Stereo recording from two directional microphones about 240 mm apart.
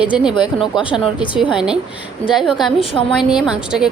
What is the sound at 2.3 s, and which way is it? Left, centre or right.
A woman's voice, centre.